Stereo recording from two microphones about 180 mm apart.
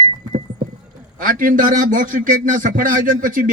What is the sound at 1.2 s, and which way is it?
A man's voice, 50° right (ahead or behind).